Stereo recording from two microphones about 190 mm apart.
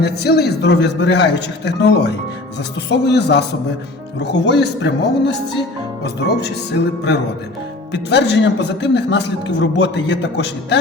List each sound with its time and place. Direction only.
0.0 s a man's voice: 60° left (ahead or behind)